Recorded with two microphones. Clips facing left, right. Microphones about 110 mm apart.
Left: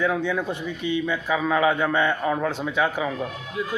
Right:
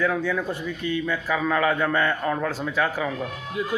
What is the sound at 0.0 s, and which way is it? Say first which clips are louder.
A man's voice: even; 20° left (ahead or behind).